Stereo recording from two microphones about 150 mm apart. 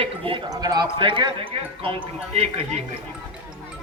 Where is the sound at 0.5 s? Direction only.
25° right (ahead or behind); by 2.8 s 45° right (ahead or behind).